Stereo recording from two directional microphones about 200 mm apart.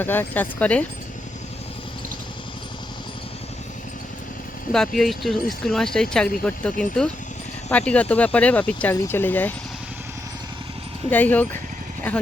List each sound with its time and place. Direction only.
0.0 s speech: 10° left (ahead or behind)
4.9 s speech: centre (ahead or behind)
11.1 s speech: 10° left (ahead or behind)